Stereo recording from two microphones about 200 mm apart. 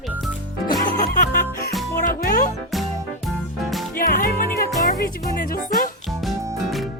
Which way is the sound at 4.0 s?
45° left (ahead or behind).